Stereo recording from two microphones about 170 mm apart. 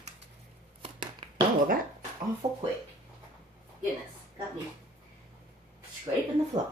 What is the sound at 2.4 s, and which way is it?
Speech, 20° right (ahead or behind).